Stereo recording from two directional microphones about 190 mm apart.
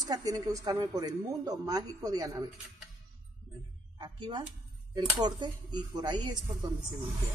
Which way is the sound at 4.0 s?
25° right (ahead or behind).